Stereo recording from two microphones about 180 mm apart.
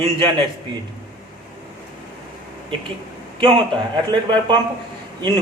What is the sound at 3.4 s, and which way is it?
Speech, 30° right (ahead or behind).